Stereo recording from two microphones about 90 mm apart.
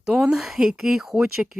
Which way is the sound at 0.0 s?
10° right (ahead or behind).